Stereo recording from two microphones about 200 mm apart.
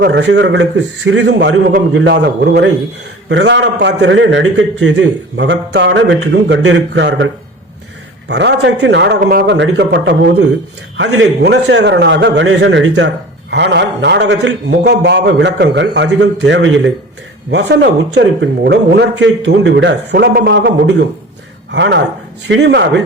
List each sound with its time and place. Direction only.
0.0 s a man's voice: 60° right (ahead or behind)
8.3 s a man's voice: 60° right (ahead or behind)